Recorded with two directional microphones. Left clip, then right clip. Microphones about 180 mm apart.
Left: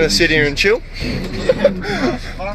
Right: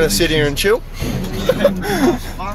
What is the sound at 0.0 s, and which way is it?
Speech, 5° right (ahead or behind).